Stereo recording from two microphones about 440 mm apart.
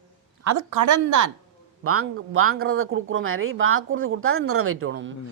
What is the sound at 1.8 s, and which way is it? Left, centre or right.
Speech, right.